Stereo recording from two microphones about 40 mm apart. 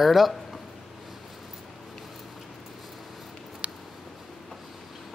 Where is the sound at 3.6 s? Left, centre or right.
Right.